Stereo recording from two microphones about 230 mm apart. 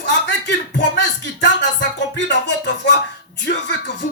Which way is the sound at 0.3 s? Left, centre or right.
Left.